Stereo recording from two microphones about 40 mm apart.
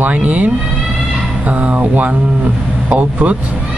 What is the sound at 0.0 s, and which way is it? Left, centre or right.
Speech, right.